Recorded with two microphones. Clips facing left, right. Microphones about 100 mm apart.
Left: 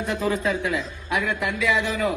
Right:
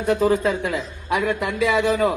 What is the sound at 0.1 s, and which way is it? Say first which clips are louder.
A man's voice: right 7 dB; 40° right (ahead or behind).